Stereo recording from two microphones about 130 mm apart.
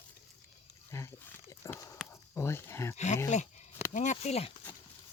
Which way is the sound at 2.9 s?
65° left (ahead or behind).